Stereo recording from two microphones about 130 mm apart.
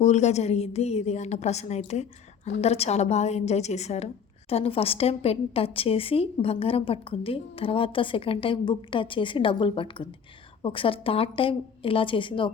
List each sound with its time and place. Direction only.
0.0 s a woman's voice: 60° left (ahead or behind); by 12.5 s 40° left (ahead or behind)